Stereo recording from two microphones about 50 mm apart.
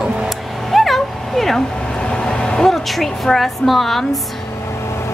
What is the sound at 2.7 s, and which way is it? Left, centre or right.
A woman's voice, centre.